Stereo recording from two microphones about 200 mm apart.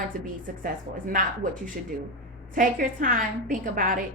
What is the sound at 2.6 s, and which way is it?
A woman's voice, 45° right (ahead or behind).